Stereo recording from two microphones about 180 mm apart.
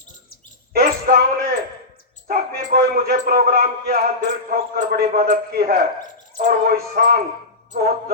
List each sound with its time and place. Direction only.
0.7 s a sound: 55° right (ahead or behind)
2.2 s a man's voice: 55° right (ahead or behind)
6.3 s music: 50° right (ahead or behind)
7.7 s speech: 55° right (ahead or behind)